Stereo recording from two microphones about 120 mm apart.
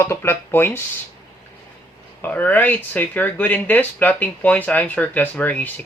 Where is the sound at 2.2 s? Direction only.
15° left (ahead or behind).